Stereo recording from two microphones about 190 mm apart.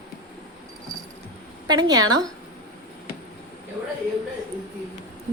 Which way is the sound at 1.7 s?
20° right (ahead or behind).